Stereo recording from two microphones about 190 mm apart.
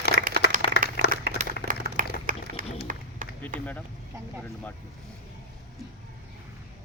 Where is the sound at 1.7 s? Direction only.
45° right (ahead or behind).